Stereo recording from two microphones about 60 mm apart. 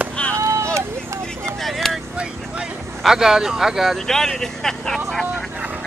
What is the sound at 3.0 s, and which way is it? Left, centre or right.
Speech, centre.